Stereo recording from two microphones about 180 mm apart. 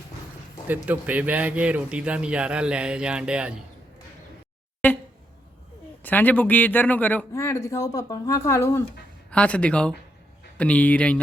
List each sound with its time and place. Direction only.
0.9 s speech: 10° right (ahead or behind)
4.8 s a sound: 10° left (ahead or behind)
6.0 s a man's voice: 10° left (ahead or behind)